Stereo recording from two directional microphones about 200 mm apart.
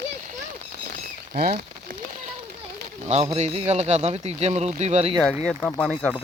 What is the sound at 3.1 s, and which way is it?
A man's voice, 30° right (ahead or behind).